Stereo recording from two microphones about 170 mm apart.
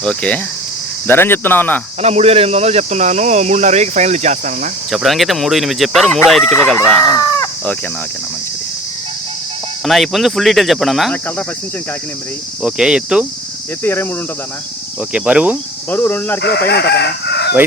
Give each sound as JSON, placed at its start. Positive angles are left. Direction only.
{"t": 0.0, "sound": "speech", "side_deg": 5}
{"t": 2.0, "sound": "speech", "side_deg": -40}
{"t": 4.9, "sound": "speech", "side_deg": 0}
{"t": 7.1, "sound": "chicken", "side_deg": 20}
{"t": 9.8, "sound": "speech", "side_deg": 0}
{"t": 12.6, "sound": "speech", "side_deg": -5}
{"t": 13.8, "sound": "speech", "side_deg": 10}
{"t": 15.1, "sound": "speech", "side_deg": -5}
{"t": 15.9, "sound": "speech", "side_deg": 10}
{"t": 16.4, "sound": "chicken", "side_deg": 70}